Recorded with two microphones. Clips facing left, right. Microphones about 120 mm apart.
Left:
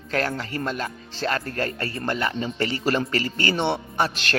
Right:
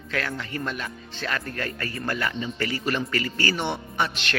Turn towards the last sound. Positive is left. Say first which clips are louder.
# left 3 dB
turn(degrees=40)  # may be behind; listen again after turning